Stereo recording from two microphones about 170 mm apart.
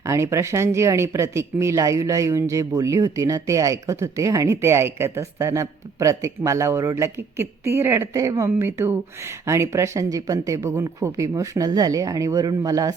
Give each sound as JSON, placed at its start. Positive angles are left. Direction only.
{"t": 0.0, "sound": "speech", "side_deg": -15}